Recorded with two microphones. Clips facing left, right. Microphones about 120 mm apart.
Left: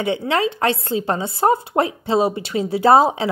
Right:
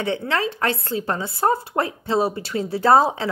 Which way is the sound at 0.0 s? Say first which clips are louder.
Left 3 dB; 10° left (ahead or behind).